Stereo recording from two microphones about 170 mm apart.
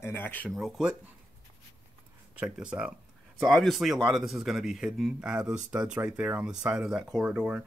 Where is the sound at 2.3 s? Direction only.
5° right (ahead or behind).